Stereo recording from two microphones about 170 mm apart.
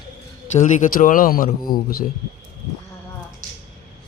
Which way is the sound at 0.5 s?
45° left (ahead or behind).